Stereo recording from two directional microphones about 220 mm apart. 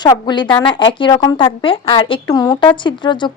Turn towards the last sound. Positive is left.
turn(degrees=20)  # may be behind; listen again after turning